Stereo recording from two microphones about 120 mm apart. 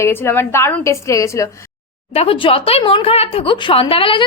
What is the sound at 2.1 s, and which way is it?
A woman's voice, 50° left (ahead or behind).